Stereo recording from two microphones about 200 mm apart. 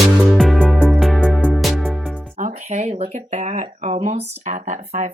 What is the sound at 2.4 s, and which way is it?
Speech, 40° right (ahead or behind).